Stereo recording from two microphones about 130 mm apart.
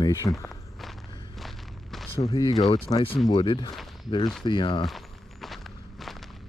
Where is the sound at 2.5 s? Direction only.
50° left (ahead or behind).